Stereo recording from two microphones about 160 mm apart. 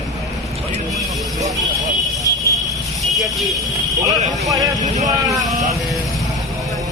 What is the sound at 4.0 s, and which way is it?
Speech, 20° right (ahead or behind).